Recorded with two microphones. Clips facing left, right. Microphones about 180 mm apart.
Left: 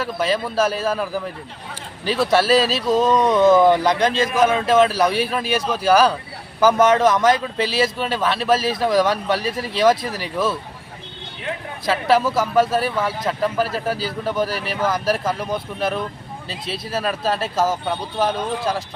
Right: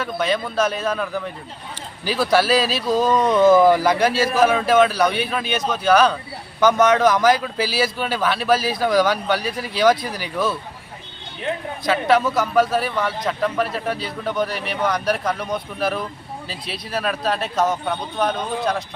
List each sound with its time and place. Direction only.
0.0 s a man's voice: 5° left (ahead or behind)
11.9 s a man's voice: centre (ahead or behind)